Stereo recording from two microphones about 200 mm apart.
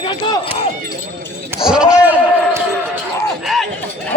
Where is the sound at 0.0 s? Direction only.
20° left (ahead or behind).